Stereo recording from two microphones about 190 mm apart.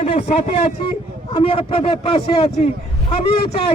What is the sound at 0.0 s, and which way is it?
A man's voice, 35° left (ahead or behind).